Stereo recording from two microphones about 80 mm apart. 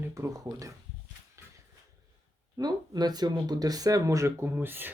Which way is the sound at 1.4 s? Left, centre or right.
Right.